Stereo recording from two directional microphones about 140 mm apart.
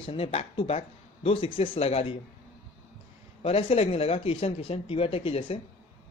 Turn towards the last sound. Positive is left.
turn(degrees=40)  # may be behind; listen again after turning